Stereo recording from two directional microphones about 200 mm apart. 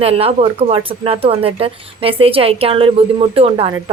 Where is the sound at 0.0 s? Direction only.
30° right (ahead or behind).